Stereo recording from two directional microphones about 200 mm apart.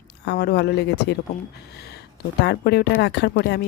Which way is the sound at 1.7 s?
55° left (ahead or behind).